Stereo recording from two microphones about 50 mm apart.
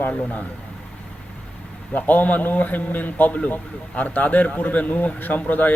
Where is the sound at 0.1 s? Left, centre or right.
Left.